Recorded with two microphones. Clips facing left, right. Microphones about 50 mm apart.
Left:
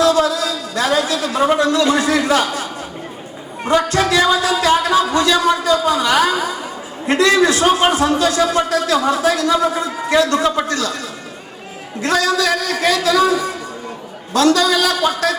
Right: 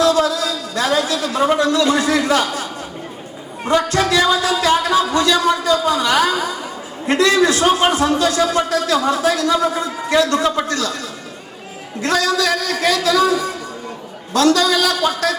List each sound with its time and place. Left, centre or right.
0.0 s a sound: centre
1.1 s a man's voice: centre
4.5 s a man's voice: left